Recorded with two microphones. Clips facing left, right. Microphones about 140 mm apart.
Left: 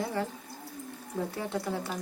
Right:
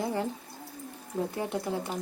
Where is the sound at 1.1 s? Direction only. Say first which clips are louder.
Right 2 dB; 30° right (ahead or behind).